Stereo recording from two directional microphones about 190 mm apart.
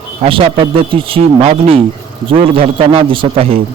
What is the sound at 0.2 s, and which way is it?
A man's voice, 30° right (ahead or behind).